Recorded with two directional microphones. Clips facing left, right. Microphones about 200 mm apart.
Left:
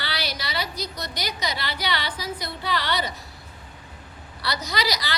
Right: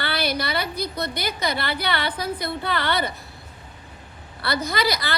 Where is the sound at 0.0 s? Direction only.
55° right (ahead or behind).